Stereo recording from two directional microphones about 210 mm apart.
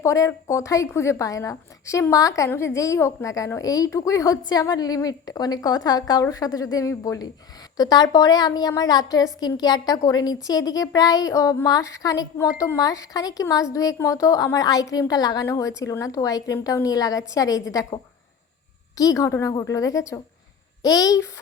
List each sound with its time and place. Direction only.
0.0 s a woman's voice: 15° left (ahead or behind)